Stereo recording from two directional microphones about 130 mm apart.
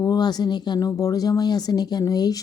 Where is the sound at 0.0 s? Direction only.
30° left (ahead or behind).